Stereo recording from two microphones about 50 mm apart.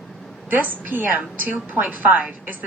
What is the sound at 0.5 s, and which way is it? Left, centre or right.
A woman's voice, right.